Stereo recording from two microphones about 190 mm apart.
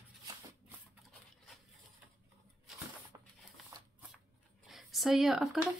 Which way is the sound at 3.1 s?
15° right (ahead or behind).